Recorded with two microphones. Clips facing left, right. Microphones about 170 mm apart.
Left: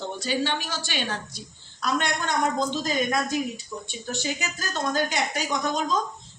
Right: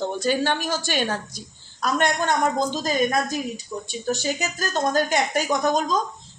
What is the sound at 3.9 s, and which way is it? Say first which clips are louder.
A woman's voice: right 6 dB; 40° right (ahead or behind).